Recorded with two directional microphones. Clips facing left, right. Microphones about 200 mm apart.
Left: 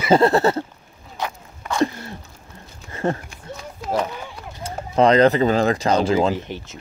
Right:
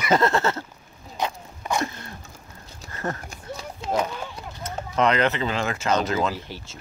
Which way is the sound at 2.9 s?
25° left (ahead or behind).